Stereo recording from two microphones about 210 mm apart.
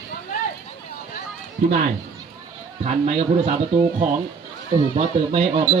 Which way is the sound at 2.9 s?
30° right (ahead or behind).